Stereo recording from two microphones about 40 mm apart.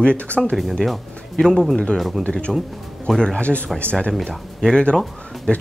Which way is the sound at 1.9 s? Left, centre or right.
Centre.